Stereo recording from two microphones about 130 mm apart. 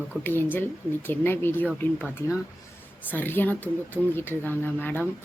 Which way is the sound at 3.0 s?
15° left (ahead or behind).